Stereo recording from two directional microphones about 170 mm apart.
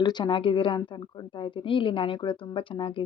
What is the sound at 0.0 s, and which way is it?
A woman's voice, 25° left (ahead or behind).